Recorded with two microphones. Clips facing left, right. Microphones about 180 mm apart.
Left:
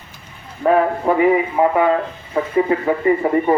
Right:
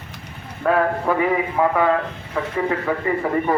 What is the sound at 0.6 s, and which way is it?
Speech, 20° left (ahead or behind).